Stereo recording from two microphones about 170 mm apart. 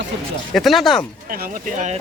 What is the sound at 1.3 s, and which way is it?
Speech, 50° right (ahead or behind).